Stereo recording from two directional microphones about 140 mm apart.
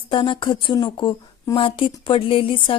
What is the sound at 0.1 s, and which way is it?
Speech, 35° left (ahead or behind).